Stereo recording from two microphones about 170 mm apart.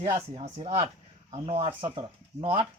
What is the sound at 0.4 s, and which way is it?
Speech, 35° right (ahead or behind).